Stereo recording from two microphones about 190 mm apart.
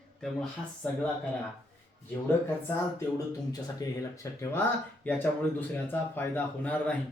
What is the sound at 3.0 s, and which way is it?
Speech, 15° left (ahead or behind).